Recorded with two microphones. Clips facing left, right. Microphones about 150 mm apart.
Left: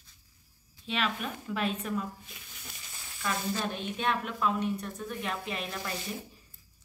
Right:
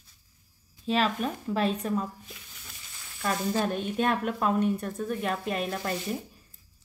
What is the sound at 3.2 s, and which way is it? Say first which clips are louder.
Speech: right 5 dB; 40° right (ahead or behind).